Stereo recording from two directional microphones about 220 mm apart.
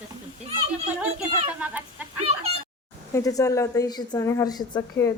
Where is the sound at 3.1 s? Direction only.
15° left (ahead or behind).